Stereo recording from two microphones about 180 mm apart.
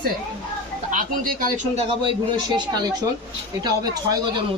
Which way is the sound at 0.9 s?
50° right (ahead or behind).